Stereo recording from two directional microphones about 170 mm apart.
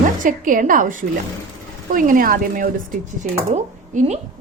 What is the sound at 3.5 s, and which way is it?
Speech, 40° right (ahead or behind).